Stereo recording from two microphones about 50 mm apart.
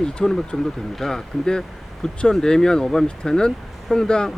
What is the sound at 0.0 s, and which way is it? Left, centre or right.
Speech, centre.